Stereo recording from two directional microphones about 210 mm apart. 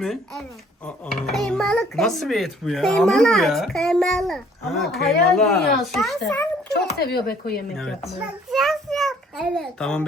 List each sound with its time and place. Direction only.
0.0 s a child's voice: centre (ahead or behind)
7.0 s speech: 45° left (ahead or behind)
7.8 s a child's voice: centre (ahead or behind)